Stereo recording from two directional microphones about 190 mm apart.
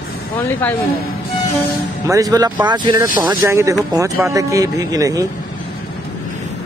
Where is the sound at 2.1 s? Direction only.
20° right (ahead or behind).